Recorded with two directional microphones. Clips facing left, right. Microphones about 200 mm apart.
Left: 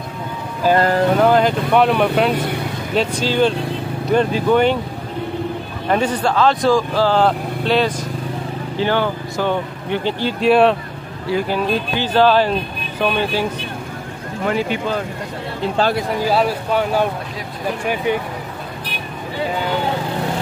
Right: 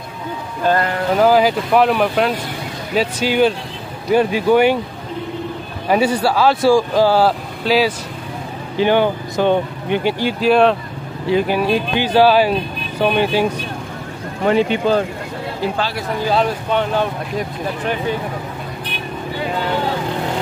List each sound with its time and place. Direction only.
1.1 s speech: 5° right (ahead or behind)
5.9 s speech: 10° right (ahead or behind)
8.7 s speech: 15° right (ahead or behind)
10.4 s speech: centre (ahead or behind)
11.2 s speech: 20° right (ahead or behind)
16.3 s speech: 5° left (ahead or behind)